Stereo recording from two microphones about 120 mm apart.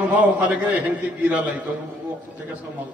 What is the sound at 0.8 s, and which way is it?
Speech, 10° right (ahead or behind).